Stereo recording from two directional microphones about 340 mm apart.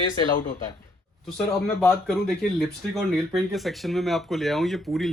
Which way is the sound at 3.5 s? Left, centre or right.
Centre.